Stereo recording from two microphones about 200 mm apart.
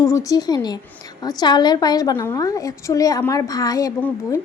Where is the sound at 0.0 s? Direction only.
15° left (ahead or behind).